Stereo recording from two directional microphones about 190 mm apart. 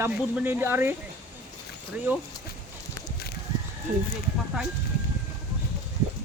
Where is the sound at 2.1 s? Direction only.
10° right (ahead or behind).